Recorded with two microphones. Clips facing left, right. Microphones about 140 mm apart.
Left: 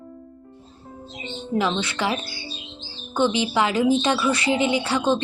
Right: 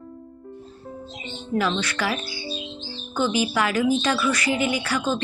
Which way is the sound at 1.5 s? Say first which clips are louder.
Left 1 dB; 20° left (ahead or behind).